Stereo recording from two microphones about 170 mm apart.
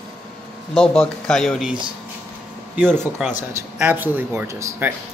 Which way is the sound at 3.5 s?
15° right (ahead or behind).